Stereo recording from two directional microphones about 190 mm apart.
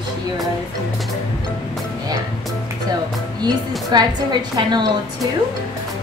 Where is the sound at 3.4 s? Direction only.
20° right (ahead or behind).